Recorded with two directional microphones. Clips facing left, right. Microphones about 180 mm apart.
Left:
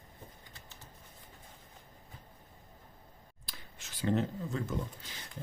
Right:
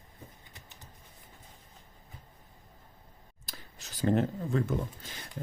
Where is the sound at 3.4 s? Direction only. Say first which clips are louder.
Right 3 dB; 40° right (ahead or behind).